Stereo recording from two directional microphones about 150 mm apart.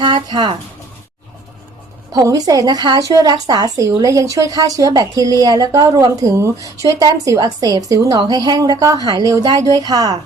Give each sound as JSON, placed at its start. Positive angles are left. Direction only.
{"t": 0.0, "sound": "speech", "side_deg": -30}
{"t": 2.1, "sound": "a woman's voice", "side_deg": -25}